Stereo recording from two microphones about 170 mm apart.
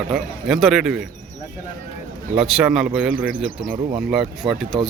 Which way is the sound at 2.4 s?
5° right (ahead or behind).